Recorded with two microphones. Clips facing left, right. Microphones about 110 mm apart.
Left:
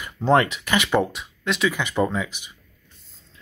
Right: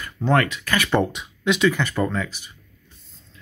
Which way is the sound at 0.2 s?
25° left (ahead or behind).